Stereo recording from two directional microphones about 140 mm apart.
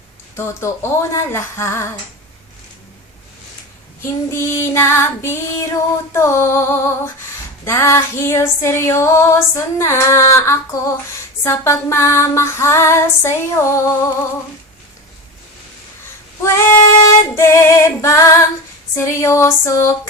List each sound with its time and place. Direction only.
0.3 s female singing: 20° left (ahead or behind)
4.0 s female singing: 20° left (ahead or behind)
16.4 s female singing: 20° left (ahead or behind)